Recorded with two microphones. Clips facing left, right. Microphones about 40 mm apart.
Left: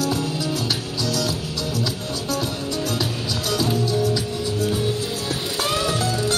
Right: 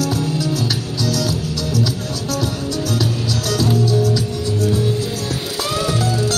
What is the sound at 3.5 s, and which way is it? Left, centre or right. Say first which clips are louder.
Music: right 4 dB; left.